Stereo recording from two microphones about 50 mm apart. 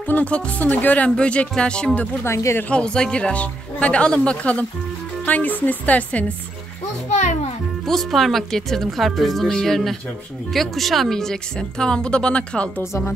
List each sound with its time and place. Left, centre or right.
0.0 s music: left
0.3 s a woman's voice: left
1.0 s speech: left
2.2 s speech: left
2.7 s a woman's voice: centre
7.8 s speech: centre; by 12.6 s left